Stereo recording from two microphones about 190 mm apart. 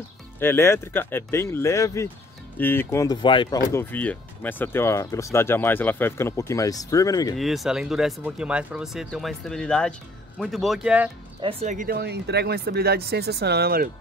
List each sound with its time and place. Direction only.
0.4 s speech: 10° left (ahead or behind)
7.3 s speech: centre (ahead or behind)
11.6 s speech: 45° right (ahead or behind)